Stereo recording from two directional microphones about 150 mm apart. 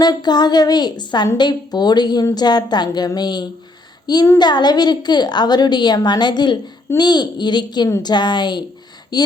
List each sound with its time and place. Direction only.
0.0 s a woman's voice: 25° left (ahead or behind)
4.0 s child singing: 25° left (ahead or behind)
4.4 s a woman's voice: 30° left (ahead or behind)